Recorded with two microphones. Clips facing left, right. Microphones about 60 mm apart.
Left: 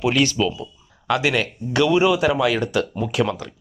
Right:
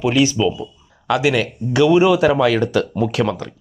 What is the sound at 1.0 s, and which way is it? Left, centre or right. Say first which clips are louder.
Speech: right 3 dB; left.